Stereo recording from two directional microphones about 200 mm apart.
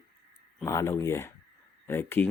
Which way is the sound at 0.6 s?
15° left (ahead or behind).